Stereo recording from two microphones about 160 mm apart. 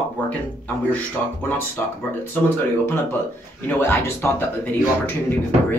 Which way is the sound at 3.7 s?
15° left (ahead or behind).